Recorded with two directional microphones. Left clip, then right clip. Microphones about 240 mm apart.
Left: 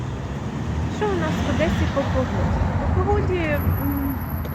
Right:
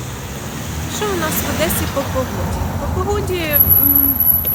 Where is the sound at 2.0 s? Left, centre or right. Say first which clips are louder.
Right 2 dB; right.